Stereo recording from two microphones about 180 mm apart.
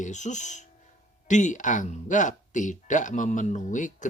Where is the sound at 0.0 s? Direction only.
40° left (ahead or behind).